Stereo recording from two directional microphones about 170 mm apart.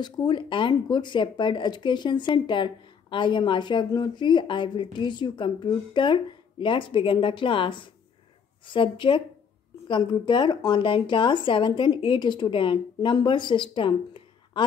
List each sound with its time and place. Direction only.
0.0 s speech: 25° left (ahead or behind)